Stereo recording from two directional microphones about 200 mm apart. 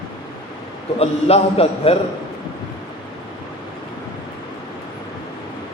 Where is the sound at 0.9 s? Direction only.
30° left (ahead or behind).